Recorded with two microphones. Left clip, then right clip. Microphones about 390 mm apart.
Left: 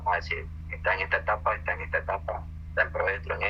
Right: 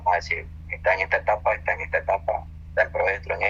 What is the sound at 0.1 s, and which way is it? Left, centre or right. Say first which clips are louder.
Speech: right 5 dB; centre.